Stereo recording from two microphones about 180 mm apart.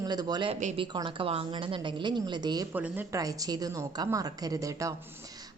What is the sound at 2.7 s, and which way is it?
A woman's voice, 10° right (ahead or behind).